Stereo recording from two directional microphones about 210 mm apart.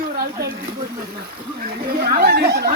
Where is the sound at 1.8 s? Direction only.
45° right (ahead or behind).